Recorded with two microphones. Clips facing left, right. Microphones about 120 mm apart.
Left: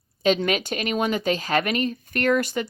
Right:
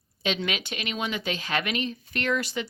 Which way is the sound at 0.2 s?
45° left (ahead or behind).